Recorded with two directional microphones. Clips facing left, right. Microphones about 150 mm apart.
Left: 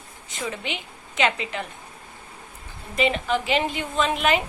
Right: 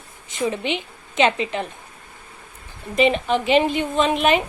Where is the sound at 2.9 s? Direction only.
20° right (ahead or behind).